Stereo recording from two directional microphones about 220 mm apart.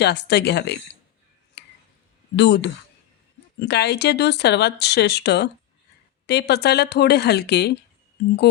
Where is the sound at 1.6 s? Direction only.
50° left (ahead or behind).